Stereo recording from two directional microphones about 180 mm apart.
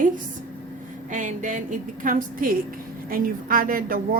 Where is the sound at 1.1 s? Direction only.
45° right (ahead or behind).